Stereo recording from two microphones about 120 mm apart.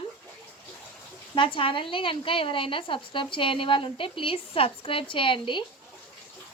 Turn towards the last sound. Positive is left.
turn(degrees=45)  # may be behind; listen again after turning